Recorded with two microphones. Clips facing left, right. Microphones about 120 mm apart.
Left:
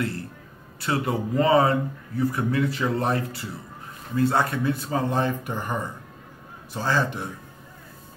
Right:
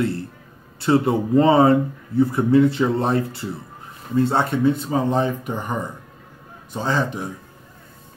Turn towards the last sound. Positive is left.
turn(degrees=-20)  # may be behind; listen again after turning